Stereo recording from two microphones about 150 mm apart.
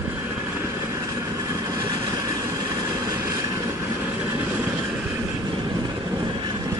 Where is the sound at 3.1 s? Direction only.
20° right (ahead or behind).